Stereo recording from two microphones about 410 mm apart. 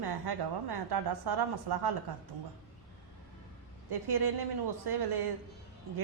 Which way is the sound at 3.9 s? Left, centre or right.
Right.